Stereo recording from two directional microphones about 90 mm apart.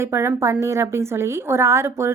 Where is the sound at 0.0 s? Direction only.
30° right (ahead or behind).